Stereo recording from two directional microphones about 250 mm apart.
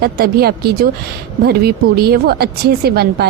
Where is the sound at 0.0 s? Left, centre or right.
Right.